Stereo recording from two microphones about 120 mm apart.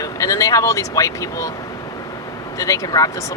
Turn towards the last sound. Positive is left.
turn(degrees=30)  # may be behind; listen again after turning